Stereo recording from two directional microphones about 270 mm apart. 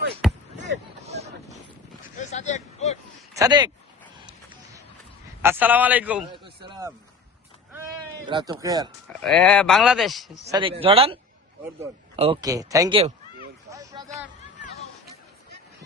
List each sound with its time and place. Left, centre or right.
0.2 s basketball bounce: centre
1.0 s boat: right
2.1 s a sound: left
3.3 s speech: centre
5.4 s a man's voice: centre
6.3 s a sound: centre
8.3 s speech: centre
9.2 s speech: centre
10.5 s speech: centre
13.7 s a sound: centre